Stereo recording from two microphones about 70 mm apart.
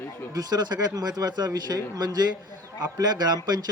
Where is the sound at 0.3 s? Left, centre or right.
Right.